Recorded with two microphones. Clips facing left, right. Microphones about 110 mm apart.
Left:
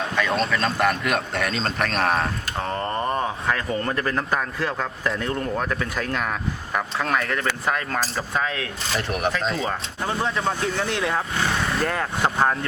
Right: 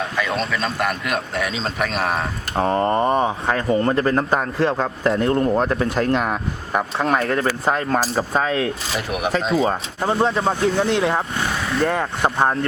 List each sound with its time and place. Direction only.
0.2 s a man's voice: centre (ahead or behind)
2.6 s speech: 25° right (ahead or behind)
9.0 s a man's voice: 5° right (ahead or behind)
9.6 s speech: 30° right (ahead or behind)
11.6 s vehicle: centre (ahead or behind)
11.9 s speech: 15° right (ahead or behind)